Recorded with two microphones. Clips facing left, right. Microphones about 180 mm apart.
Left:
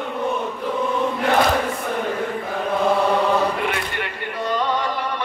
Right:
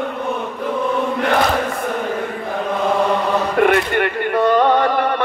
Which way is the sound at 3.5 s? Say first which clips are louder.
Right 10 dB; 55° right (ahead or behind).